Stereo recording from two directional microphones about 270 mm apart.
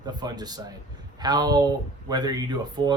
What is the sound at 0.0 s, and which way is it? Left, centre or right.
Speech, centre.